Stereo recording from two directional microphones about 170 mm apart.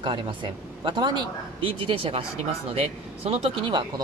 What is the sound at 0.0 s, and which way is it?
Speech, 30° right (ahead or behind).